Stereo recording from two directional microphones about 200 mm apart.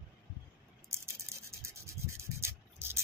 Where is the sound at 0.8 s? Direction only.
15° right (ahead or behind).